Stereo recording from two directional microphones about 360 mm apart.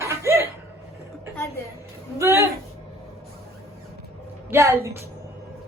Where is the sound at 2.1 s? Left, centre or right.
Centre.